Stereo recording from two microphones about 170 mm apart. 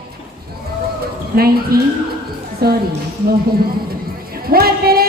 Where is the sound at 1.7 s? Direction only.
60° right (ahead or behind).